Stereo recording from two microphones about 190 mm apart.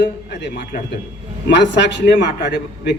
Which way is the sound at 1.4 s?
70° left (ahead or behind).